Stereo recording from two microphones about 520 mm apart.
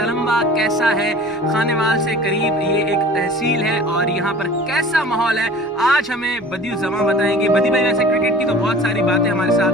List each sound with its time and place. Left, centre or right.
0.3 s speech: centre
4.7 s speech: centre